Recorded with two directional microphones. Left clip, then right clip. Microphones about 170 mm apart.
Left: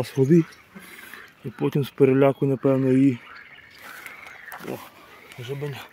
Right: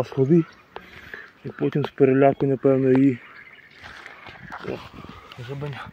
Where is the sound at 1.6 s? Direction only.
25° left (ahead or behind).